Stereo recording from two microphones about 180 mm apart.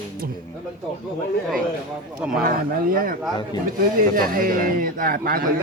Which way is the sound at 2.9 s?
50° right (ahead or behind).